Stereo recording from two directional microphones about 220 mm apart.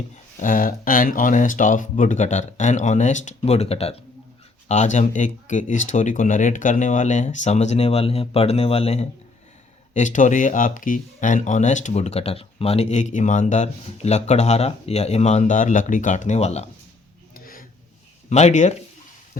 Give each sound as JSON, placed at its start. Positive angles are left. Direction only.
{"t": 0.3, "sound": "speech", "side_deg": 35}
{"t": 17.3, "sound": "a sound", "side_deg": 40}
{"t": 18.3, "sound": "speech", "side_deg": 30}